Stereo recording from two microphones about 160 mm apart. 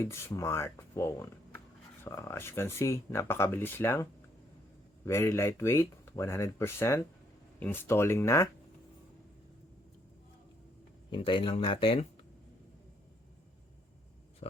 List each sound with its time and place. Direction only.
0.0 s speech: 15° left (ahead or behind)
11.1 s speech: 30° left (ahead or behind)